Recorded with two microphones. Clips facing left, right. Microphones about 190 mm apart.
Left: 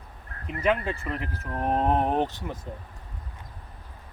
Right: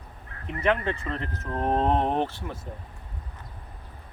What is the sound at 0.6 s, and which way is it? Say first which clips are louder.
Speech: even; 10° left (ahead or behind).